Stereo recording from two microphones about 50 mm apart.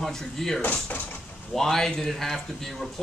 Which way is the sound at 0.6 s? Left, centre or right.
Left.